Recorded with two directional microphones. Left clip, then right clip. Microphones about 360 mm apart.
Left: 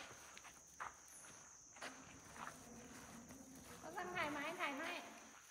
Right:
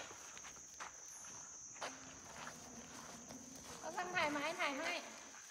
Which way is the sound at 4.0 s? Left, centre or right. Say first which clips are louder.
Right 5 dB; centre.